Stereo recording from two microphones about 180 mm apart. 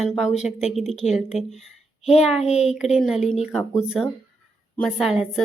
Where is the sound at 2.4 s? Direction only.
35° left (ahead or behind).